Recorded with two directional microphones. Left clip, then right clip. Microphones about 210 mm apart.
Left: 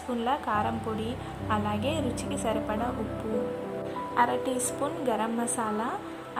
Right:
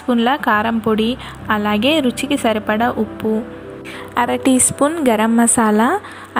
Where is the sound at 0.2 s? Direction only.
20° right (ahead or behind).